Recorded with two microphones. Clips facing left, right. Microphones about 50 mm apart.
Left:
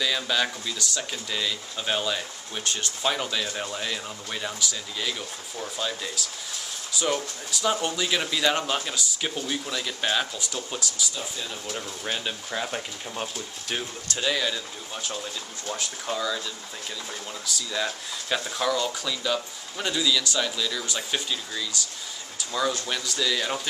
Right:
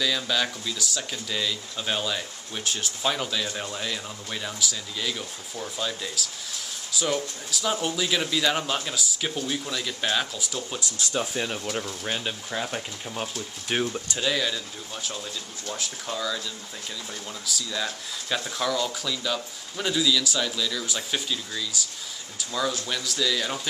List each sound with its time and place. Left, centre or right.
0.0 s speech: centre
11.1 s speech: right
11.8 s speech: centre
13.7 s speech: right
14.1 s speech: centre
17.5 s speech: centre